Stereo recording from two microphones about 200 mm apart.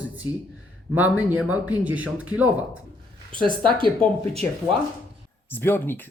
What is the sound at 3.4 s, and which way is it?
Speech, 25° right (ahead or behind).